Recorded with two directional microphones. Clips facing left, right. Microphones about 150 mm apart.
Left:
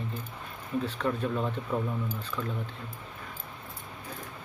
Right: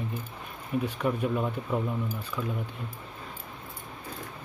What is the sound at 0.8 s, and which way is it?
Speech, 15° right (ahead or behind).